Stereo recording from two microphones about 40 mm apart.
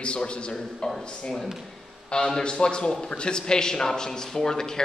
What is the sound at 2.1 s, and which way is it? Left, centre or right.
Speech, centre.